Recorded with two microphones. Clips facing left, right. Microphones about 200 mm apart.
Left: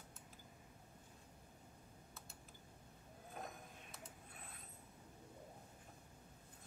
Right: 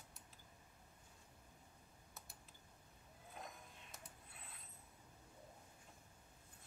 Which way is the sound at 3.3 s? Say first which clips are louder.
Left 4 dB; 50° left (ahead or behind).